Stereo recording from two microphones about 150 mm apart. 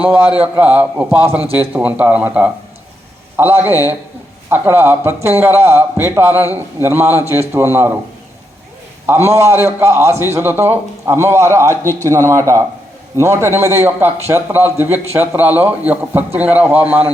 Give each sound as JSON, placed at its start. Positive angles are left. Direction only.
{"t": 0.3, "sound": "a man's voice", "side_deg": -15}
{"t": 9.0, "sound": "a man's voice", "side_deg": -20}